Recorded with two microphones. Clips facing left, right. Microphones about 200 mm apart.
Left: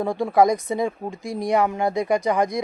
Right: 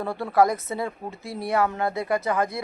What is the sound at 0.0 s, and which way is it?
Speech, 15° left (ahead or behind).